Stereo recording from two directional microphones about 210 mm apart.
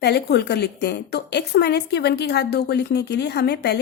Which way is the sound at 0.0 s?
50° left (ahead or behind).